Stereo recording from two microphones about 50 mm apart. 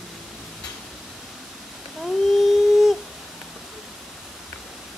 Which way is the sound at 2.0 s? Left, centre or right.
Centre.